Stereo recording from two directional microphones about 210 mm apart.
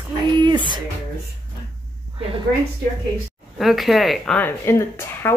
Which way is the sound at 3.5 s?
Centre (ahead or behind).